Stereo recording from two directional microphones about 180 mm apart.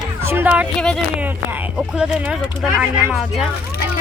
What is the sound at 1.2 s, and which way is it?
Speech, 10° right (ahead or behind).